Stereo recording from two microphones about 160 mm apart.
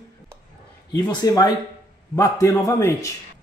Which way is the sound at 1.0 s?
25° left (ahead or behind).